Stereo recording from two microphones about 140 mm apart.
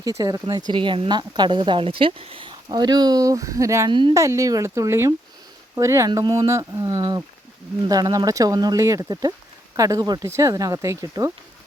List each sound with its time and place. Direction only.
0.0 s speech: 25° right (ahead or behind)
0.7 s speech: 35° right (ahead or behind)